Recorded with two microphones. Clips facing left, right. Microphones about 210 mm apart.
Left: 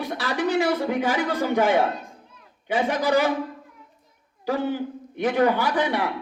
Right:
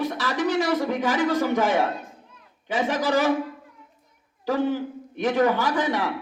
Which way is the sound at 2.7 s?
10° left (ahead or behind).